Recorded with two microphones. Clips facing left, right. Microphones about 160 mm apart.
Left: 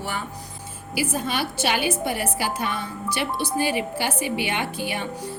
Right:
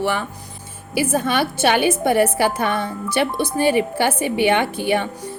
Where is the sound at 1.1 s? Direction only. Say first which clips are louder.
Right 6 dB; 60° right (ahead or behind).